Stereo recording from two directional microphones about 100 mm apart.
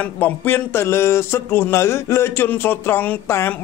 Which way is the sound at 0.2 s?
20° left (ahead or behind).